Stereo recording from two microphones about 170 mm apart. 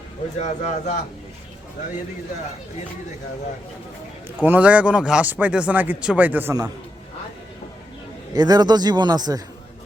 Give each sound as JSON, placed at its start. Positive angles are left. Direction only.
{"t": 0.3, "sound": "speech", "side_deg": 45}
{"t": 4.4, "sound": "speech", "side_deg": -10}
{"t": 8.3, "sound": "a man's voice", "side_deg": -25}